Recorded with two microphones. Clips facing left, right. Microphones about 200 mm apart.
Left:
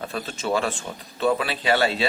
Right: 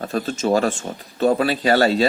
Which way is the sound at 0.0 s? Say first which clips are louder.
Right 7 dB; 40° right (ahead or behind).